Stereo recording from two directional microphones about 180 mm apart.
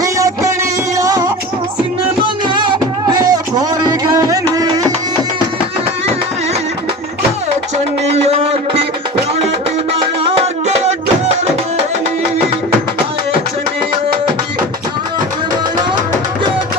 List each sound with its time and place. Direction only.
0.0 s music: 20° right (ahead or behind)
8.1 s music: 35° right (ahead or behind)
10.2 s music: 35° right (ahead or behind)